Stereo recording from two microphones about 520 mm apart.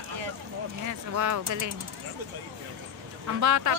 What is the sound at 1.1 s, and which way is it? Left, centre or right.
Speech, right.